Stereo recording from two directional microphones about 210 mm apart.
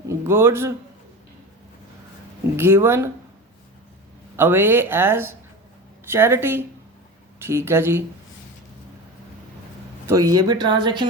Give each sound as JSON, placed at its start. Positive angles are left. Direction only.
{"t": 0.1, "sound": "a man's voice", "side_deg": -10}
{"t": 2.6, "sound": "speech", "side_deg": -10}
{"t": 4.4, "sound": "speech", "side_deg": -10}
{"t": 10.1, "sound": "speech", "side_deg": -15}